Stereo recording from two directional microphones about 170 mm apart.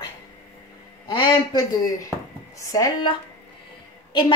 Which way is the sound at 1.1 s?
30° left (ahead or behind).